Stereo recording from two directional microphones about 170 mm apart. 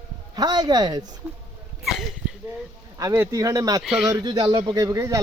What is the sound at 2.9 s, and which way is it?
Speech, 20° right (ahead or behind).